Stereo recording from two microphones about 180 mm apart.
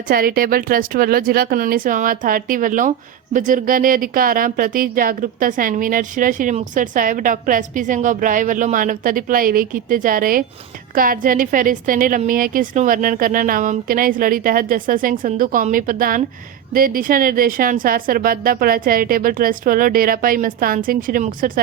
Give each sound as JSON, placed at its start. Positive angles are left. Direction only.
{"t": 0.1, "sound": "speech", "side_deg": -55}